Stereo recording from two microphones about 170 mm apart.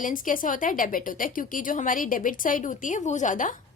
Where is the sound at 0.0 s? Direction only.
50° left (ahead or behind).